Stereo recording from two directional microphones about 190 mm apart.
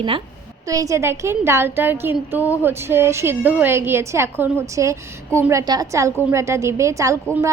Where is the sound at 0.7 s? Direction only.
15° right (ahead or behind).